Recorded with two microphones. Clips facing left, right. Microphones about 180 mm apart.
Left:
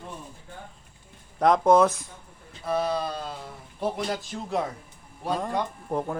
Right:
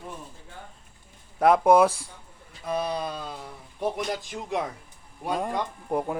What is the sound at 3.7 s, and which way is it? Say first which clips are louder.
Speech: even; 15° right (ahead or behind).